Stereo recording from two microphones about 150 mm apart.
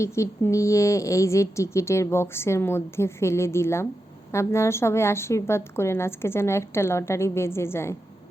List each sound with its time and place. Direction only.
0.0 s a woman's voice: 20° left (ahead or behind)